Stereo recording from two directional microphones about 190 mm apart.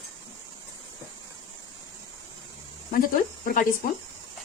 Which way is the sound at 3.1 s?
50° left (ahead or behind).